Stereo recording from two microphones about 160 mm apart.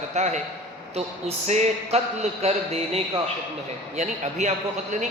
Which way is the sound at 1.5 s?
45° right (ahead or behind).